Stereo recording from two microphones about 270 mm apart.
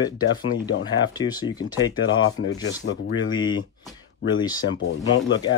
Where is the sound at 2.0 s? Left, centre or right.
Left.